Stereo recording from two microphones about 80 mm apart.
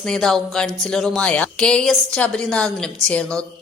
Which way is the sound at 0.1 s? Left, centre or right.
Centre.